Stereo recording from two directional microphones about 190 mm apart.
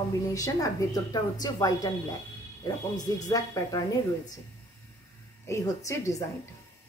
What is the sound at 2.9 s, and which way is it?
A woman's voice, 20° left (ahead or behind).